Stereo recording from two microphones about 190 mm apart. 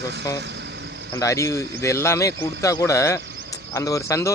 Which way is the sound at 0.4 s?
65° right (ahead or behind).